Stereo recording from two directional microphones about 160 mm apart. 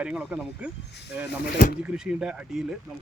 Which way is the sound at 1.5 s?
65° left (ahead or behind).